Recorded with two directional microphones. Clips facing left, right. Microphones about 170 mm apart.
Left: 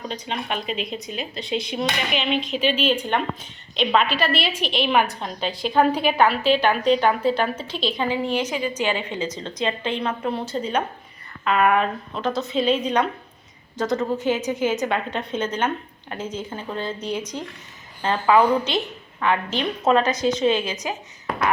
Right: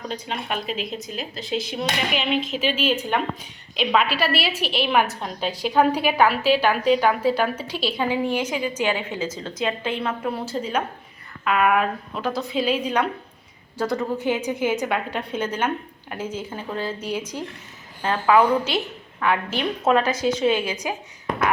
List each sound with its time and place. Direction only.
0.1 s a woman's voice: 5° right (ahead or behind)